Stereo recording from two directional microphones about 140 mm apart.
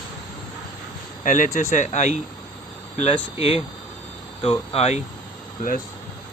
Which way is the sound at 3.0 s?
45° left (ahead or behind).